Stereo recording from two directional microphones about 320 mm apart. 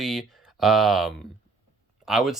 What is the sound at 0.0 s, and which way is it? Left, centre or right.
Speech, centre.